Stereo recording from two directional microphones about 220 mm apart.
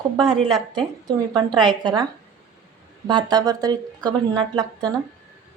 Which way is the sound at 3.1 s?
20° right (ahead or behind).